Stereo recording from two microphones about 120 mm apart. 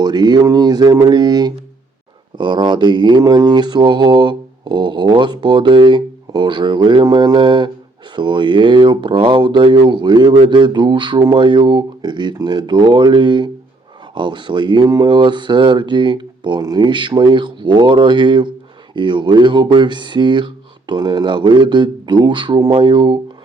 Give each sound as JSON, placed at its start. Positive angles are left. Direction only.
{"t": 0.0, "sound": "speech", "side_deg": -35}